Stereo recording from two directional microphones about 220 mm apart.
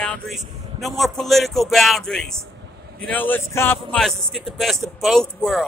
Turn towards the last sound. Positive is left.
turn(degrees=0)  # may be behind; listen again after turning